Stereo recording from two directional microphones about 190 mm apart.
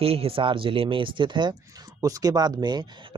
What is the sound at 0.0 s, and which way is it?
Speech, 30° right (ahead or behind).